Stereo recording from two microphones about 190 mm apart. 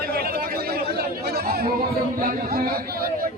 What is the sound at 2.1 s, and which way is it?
A man's voice, 45° right (ahead or behind).